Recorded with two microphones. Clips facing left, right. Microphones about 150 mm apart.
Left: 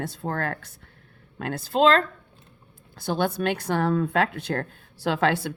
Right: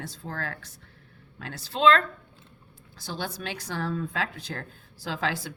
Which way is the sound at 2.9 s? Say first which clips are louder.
Left 10 dB; 55° left (ahead or behind).